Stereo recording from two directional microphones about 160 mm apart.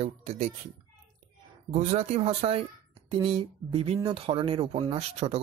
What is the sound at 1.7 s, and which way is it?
Speech, 45° right (ahead or behind).